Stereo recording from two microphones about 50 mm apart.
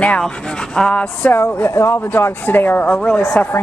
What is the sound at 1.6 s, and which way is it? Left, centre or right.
Speech, left.